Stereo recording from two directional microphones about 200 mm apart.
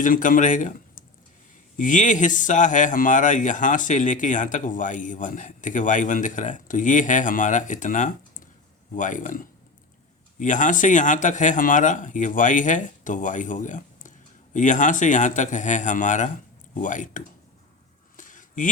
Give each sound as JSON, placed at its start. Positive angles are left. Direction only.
{"t": 0.0, "sound": "speech", "side_deg": 40}
{"t": 1.7, "sound": "speech", "side_deg": 40}
{"t": 18.2, "sound": "a sound", "side_deg": 40}